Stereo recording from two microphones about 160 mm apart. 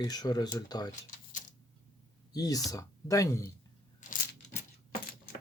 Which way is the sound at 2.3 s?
25° left (ahead or behind).